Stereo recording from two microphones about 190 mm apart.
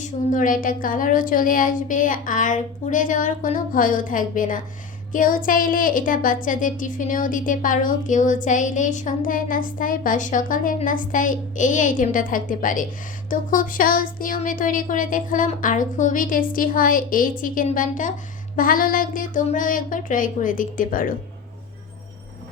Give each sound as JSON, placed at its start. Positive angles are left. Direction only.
{"t": 0.0, "sound": "a woman's voice", "side_deg": 45}